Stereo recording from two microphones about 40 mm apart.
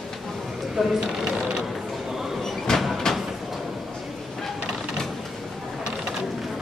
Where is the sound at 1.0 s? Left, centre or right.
Centre.